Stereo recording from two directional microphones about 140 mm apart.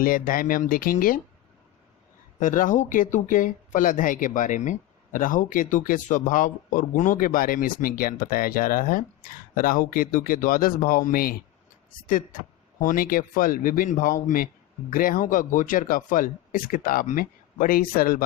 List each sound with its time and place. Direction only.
0.0 s speech: 85° left
2.4 s speech: 70° left (ahead or behind); by 18.2 s 90° left